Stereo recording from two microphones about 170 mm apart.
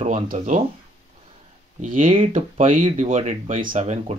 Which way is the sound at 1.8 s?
55° right (ahead or behind).